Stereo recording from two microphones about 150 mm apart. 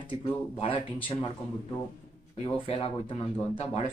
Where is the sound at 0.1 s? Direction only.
40° left (ahead or behind).